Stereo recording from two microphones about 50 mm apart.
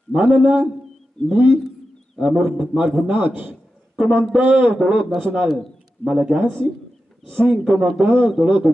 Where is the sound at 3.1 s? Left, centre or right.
Right.